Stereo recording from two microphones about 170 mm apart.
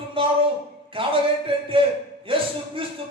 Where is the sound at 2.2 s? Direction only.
30° right (ahead or behind).